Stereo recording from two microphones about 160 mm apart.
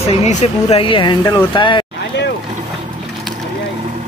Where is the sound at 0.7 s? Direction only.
30° left (ahead or behind).